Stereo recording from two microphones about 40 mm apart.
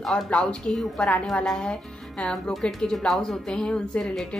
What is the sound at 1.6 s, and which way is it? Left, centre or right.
A woman's voice, left.